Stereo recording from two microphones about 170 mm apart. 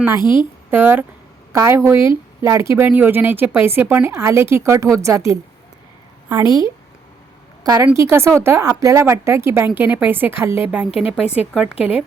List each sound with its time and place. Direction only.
0.2 s a woman's voice: 25° left (ahead or behind)
0.7 s a woman's voice: 10° right (ahead or behind)